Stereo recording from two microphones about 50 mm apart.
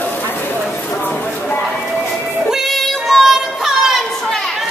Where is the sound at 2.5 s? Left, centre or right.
Centre.